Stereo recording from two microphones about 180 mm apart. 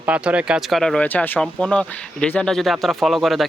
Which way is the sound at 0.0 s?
5° right (ahead or behind).